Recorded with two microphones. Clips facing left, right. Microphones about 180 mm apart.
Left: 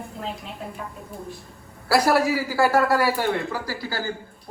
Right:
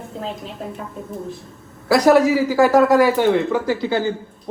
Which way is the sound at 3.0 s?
5° left (ahead or behind).